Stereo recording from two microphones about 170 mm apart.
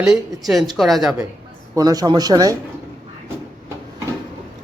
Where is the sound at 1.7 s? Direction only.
20° right (ahead or behind).